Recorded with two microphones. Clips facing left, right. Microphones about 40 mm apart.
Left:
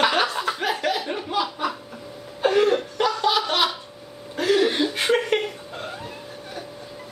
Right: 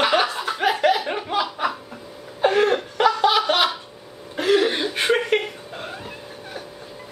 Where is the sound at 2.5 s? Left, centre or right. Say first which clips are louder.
Left 1 dB; centre.